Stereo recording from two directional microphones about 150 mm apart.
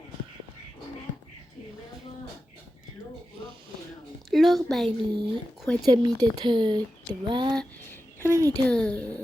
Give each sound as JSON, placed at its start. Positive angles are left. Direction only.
{"t": 4.3, "sound": "a woman's voice", "side_deg": 0}
{"t": 4.9, "sound": "speech", "side_deg": -30}
{"t": 7.5, "sound": "a sound", "side_deg": 5}
{"t": 8.2, "sound": "speech", "side_deg": -20}
{"t": 8.6, "sound": "speech", "side_deg": 5}